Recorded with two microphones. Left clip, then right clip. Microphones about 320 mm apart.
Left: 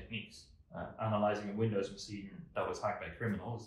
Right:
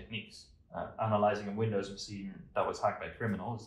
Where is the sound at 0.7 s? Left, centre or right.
Centre.